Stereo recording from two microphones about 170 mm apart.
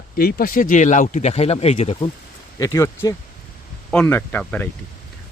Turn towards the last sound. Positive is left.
turn(degrees=10)  # may be behind; listen again after turning